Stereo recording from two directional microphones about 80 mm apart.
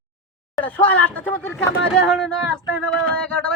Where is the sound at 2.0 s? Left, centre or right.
Centre.